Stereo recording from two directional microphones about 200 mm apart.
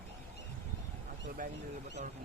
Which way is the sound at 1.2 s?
45° right (ahead or behind).